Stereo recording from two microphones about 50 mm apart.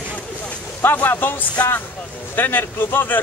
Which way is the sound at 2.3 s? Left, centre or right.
Left.